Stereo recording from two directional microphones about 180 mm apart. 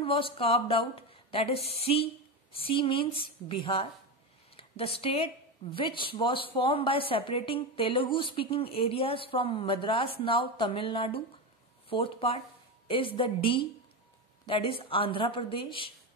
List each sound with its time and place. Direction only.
0.0 s speech: 30° left (ahead or behind)